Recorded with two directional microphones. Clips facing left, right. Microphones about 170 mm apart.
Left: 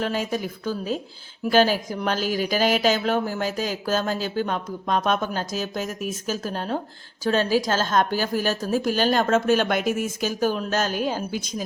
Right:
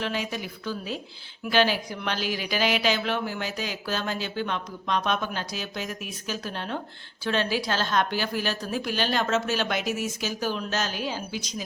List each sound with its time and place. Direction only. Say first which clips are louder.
0.0 s a woman's voice: left 5 dB; 45° left (ahead or behind)